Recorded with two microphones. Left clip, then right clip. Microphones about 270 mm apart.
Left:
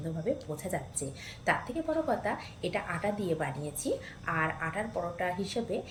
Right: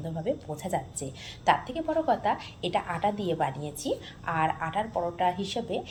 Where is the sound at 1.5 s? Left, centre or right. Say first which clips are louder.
Right 5 dB; centre.